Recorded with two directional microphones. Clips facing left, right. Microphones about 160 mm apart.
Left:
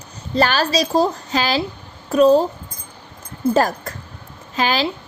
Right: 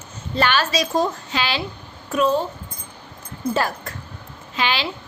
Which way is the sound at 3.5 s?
40° left (ahead or behind).